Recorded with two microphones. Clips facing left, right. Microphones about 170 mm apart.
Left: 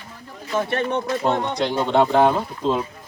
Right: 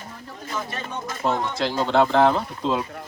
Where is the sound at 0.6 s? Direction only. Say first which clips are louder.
Left 11 dB; 65° left (ahead or behind).